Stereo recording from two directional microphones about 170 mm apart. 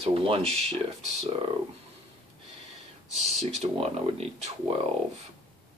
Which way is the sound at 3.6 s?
40° right (ahead or behind).